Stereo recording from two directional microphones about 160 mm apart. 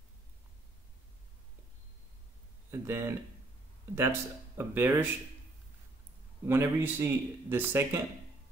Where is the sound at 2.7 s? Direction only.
15° right (ahead or behind).